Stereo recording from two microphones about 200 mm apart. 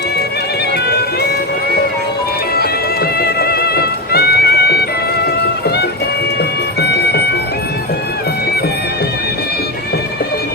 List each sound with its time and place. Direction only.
0.9 s music: 50° left (ahead or behind)
2.6 s music: 50° left (ahead or behind)